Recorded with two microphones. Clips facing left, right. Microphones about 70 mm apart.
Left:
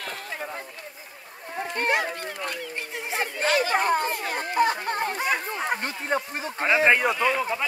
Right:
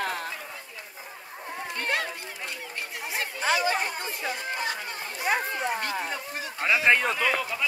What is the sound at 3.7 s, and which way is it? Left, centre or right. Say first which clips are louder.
Speech: left 8 dB; left.